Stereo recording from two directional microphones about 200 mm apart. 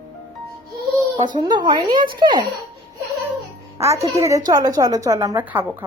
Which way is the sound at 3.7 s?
15° right (ahead or behind).